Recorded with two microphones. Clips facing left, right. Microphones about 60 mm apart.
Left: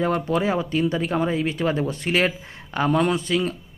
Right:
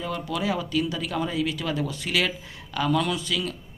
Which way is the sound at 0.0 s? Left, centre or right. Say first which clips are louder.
Left 7 dB; left.